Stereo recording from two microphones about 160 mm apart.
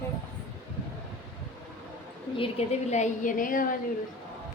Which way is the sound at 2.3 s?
35° left (ahead or behind).